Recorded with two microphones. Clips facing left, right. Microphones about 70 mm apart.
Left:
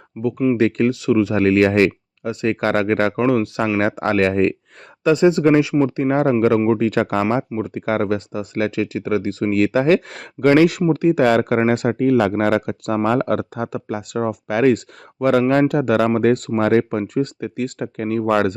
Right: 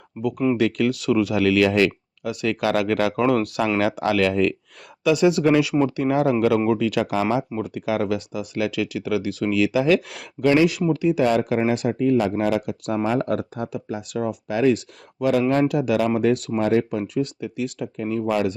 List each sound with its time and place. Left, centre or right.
0.1 s speech: centre
0.5 s speech: left
3.2 s speech: left
12.3 s speech: left
13.1 s speech: left
17.0 s speech: left